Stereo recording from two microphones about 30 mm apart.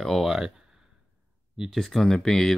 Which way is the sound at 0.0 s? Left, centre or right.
Centre.